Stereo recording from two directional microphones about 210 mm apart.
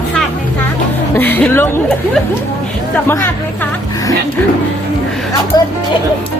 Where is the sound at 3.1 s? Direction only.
10° left (ahead or behind).